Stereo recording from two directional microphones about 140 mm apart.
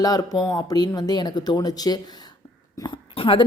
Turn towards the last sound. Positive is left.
turn(degrees=40)  # may be behind; listen again after turning